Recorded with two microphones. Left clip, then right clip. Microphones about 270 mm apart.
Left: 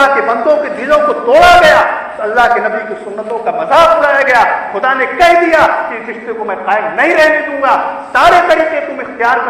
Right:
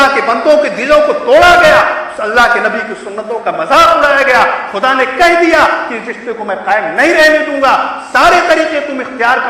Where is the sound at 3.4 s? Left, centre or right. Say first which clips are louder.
Even; right.